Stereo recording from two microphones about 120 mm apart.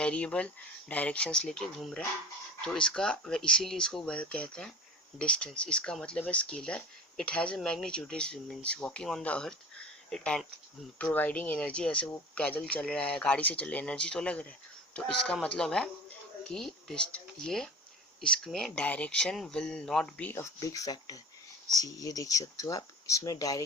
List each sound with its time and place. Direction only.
0.0 s speech: 10° left (ahead or behind)
20.3 s speech: 25° left (ahead or behind)